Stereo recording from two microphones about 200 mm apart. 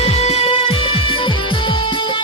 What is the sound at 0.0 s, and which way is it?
Music, 30° left (ahead or behind).